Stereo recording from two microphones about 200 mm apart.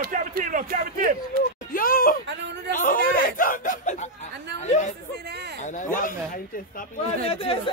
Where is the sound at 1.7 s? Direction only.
45° left (ahead or behind).